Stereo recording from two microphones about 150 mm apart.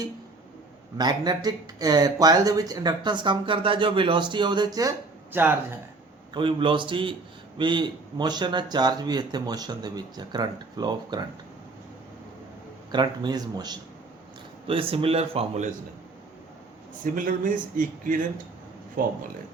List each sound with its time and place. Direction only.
0.9 s speech: 30° right (ahead or behind)
6.3 s speech: 35° right (ahead or behind)
12.9 s speech: 30° right (ahead or behind)
14.7 s speech: 40° right (ahead or behind)
17.0 s a man's voice: 65° right (ahead or behind)